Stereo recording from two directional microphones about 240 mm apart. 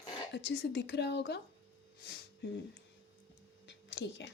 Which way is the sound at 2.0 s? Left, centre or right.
Left.